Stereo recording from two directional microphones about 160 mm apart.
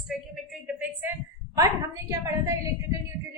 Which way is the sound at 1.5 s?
20° right (ahead or behind).